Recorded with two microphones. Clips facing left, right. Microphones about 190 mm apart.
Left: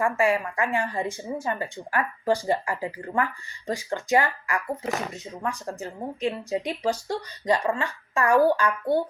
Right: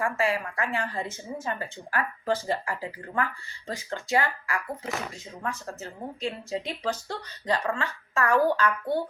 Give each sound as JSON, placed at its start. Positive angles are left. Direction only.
{"t": 0.0, "sound": "speech", "side_deg": 15}